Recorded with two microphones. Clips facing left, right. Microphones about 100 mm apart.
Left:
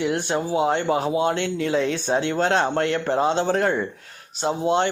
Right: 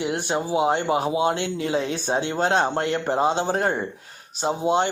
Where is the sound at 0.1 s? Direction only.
15° right (ahead or behind).